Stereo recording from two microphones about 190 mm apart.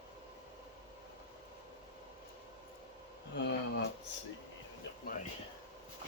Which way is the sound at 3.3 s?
65° left (ahead or behind).